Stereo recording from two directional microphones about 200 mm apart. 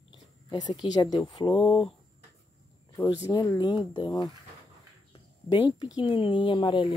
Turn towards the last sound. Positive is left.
turn(degrees=25)  # may be behind; listen again after turning